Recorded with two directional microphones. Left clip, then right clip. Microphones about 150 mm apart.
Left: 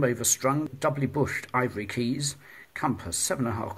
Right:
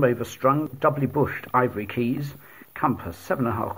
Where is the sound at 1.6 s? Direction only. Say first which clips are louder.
Right 4 dB; 45° right (ahead or behind).